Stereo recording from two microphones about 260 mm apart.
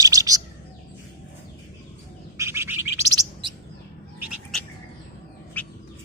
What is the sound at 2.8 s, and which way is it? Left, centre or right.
Bird, left.